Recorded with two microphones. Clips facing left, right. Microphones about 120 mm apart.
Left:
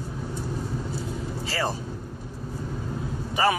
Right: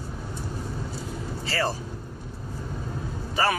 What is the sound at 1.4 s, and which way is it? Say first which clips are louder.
Speech: right 1 dB; 15° left (ahead or behind).